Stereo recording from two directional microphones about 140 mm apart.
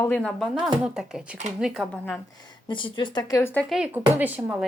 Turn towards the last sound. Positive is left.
turn(degrees=-10)  # may be behind; listen again after turning